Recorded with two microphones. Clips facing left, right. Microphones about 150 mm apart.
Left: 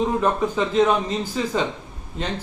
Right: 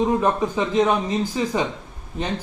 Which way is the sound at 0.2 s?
15° right (ahead or behind).